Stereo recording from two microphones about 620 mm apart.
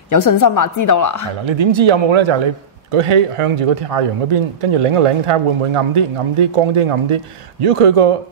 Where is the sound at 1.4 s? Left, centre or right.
Right.